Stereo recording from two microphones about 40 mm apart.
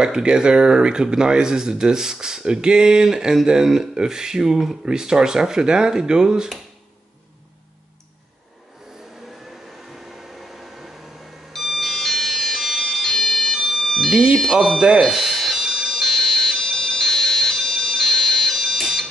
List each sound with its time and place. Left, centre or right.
0.0 s speech: centre
9.9 s microwave oven: centre
11.5 s alarm: centre
14.1 s speech: centre
14.5 s speech: centre
14.8 s speech: centre
15.1 s fire alarm: centre
16.0 s fire alarm: centre